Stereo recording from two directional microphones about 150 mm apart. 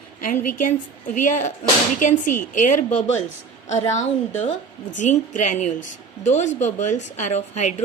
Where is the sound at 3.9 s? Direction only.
50° left (ahead or behind).